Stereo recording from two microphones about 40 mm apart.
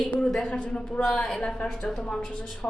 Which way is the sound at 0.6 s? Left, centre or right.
Left.